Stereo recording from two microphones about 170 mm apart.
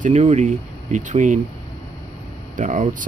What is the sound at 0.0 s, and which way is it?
Speech, 45° right (ahead or behind).